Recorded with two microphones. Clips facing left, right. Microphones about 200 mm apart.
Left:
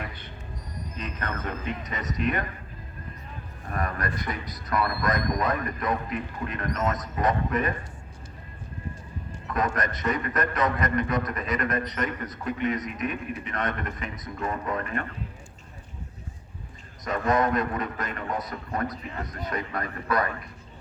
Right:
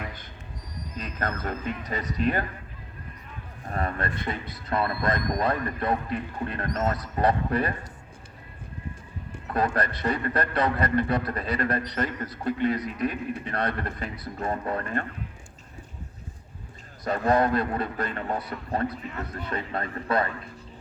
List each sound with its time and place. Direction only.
0.9 s a man's voice: 35° right (ahead or behind)
3.7 s a man's voice: 30° right (ahead or behind)
9.5 s a man's voice: 35° right (ahead or behind)
17.0 s a man's voice: 35° right (ahead or behind)